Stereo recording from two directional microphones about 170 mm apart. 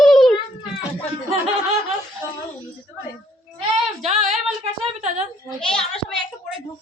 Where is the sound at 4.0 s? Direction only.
40° right (ahead or behind).